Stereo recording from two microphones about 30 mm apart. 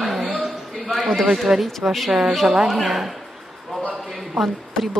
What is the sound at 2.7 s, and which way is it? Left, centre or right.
Speech, centre.